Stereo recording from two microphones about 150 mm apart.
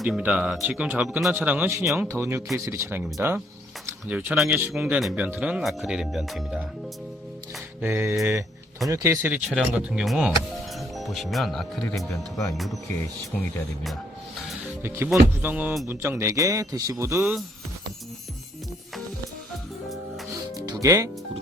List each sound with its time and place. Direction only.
0.0 s speech: 5° right (ahead or behind)
7.8 s speech: 15° right (ahead or behind)
9.5 s speech: 5° right (ahead or behind)
12.1 s speech: 20° left (ahead or behind)
12.5 s speech: centre (ahead or behind)
14.8 s speech: 15° right (ahead or behind)
20.8 s speech: 20° right (ahead or behind)